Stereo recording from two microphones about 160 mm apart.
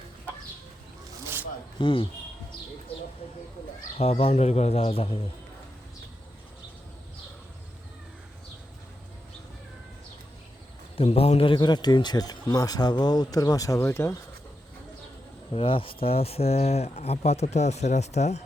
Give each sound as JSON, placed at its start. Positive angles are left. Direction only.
{"t": 1.8, "sound": "speech", "side_deg": 30}
{"t": 3.9, "sound": "speech", "side_deg": 40}
{"t": 10.9, "sound": "speech", "side_deg": 40}
{"t": 15.5, "sound": "speech", "side_deg": 35}